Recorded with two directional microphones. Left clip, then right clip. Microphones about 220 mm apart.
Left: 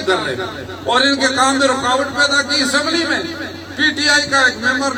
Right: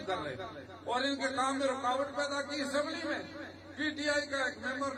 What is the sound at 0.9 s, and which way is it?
A man's voice, 45° left (ahead or behind).